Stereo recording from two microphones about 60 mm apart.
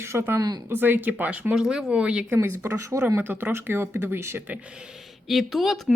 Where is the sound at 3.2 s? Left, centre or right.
Right.